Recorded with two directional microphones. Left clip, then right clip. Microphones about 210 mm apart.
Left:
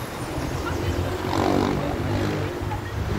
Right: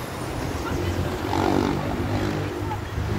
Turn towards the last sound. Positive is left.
turn(degrees=15)  # may be behind; listen again after turning